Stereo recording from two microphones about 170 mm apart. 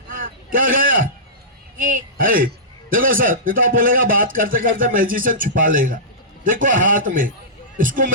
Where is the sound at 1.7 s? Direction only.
55° right (ahead or behind).